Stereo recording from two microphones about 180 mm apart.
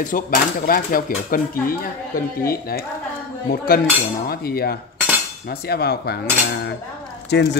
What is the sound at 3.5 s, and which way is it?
Speech, 55° left (ahead or behind).